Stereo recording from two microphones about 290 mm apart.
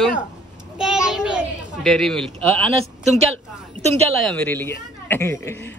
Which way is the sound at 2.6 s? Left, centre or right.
Centre.